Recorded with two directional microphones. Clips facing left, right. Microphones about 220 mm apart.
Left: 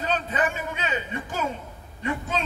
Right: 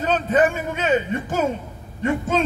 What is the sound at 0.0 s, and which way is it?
A man's voice, 45° right (ahead or behind).